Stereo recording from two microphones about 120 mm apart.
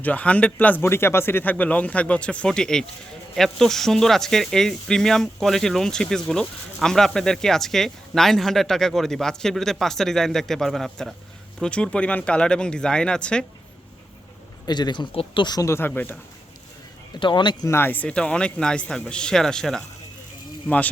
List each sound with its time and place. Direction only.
0.0 s speech: 10° left (ahead or behind)
14.7 s speech: 40° left (ahead or behind)
15.4 s speech: 30° left (ahead or behind); by 16.1 s 15° left (ahead or behind)
17.2 s speech: 40° left (ahead or behind)
17.7 s speech: 20° left (ahead or behind)